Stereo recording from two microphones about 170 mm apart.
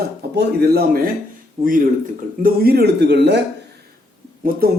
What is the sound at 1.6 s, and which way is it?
Speech, 55° right (ahead or behind).